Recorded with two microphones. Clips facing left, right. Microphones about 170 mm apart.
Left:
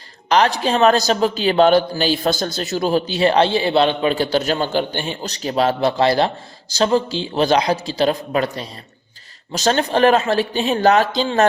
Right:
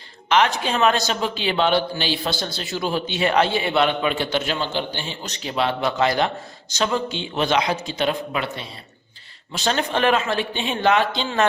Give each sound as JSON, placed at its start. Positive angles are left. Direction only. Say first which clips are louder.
{"t": 0.3, "sound": "a man's voice", "louder": "left 3 dB", "side_deg": 35}
{"t": 5.2, "sound": "a man's voice", "louder": "left 5 dB", "side_deg": 40}